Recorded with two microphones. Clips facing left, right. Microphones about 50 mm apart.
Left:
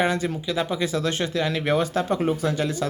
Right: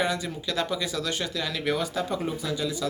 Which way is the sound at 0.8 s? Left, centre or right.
Left.